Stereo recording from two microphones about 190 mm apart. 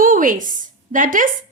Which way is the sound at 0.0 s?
45° right (ahead or behind).